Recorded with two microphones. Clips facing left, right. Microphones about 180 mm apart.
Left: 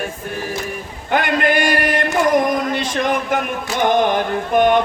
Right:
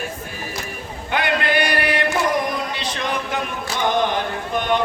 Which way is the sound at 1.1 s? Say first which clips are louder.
Left 4 dB; 45° left (ahead or behind).